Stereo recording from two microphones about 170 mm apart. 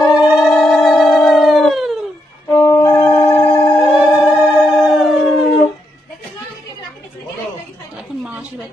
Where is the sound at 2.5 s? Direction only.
20° left (ahead or behind).